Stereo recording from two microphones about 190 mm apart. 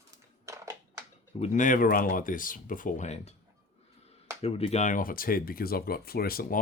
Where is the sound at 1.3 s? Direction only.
35° left (ahead or behind).